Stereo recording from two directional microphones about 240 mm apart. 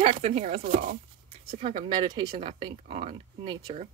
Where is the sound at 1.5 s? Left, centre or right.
Right.